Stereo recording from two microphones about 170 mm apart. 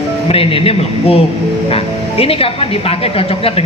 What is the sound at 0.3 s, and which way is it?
Speech, 35° left (ahead or behind).